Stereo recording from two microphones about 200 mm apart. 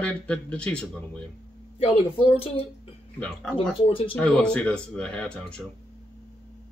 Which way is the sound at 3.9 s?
25° left (ahead or behind).